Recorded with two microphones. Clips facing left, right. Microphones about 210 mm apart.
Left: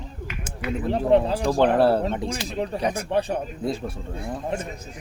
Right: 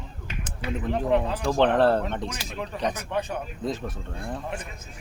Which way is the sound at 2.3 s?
30° left (ahead or behind).